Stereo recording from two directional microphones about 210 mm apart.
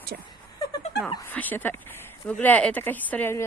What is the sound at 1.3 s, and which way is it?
Speech, 10° left (ahead or behind).